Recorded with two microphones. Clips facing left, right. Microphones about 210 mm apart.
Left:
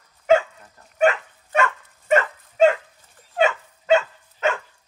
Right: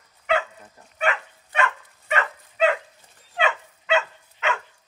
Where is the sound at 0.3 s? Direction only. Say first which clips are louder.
Left 7 dB; 45° left (ahead or behind).